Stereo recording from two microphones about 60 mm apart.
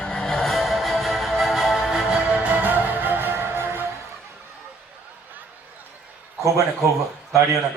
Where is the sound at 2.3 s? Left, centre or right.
Right.